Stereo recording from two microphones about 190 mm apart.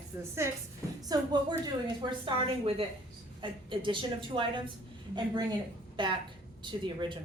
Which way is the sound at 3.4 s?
25° right (ahead or behind).